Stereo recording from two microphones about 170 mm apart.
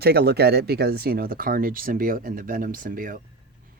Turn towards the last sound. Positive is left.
turn(degrees=-55)  # may be behind; listen again after turning